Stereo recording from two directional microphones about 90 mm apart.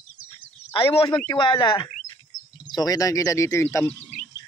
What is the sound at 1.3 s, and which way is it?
Speech, 60° left (ahead or behind).